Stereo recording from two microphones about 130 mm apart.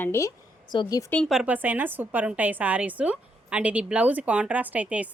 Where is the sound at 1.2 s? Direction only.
5° right (ahead or behind).